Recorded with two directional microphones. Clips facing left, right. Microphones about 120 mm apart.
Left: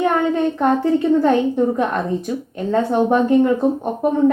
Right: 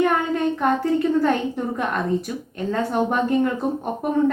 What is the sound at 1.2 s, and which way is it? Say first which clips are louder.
A woman's voice: left 6 dB; 25° left (ahead or behind).